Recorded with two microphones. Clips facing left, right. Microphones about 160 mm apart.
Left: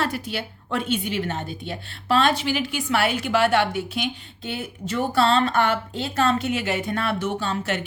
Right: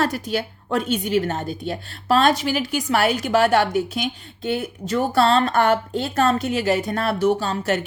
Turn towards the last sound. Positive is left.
turn(degrees=-40)  # may be behind; listen again after turning